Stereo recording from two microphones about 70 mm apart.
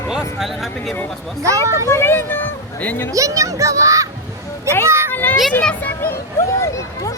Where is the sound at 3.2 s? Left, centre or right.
Right.